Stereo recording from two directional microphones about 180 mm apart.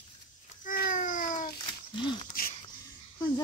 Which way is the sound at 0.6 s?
45° left (ahead or behind).